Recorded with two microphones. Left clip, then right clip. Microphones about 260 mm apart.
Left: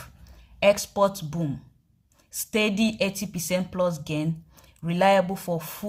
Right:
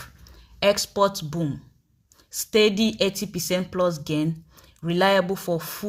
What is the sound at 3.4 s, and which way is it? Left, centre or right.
Speech, centre.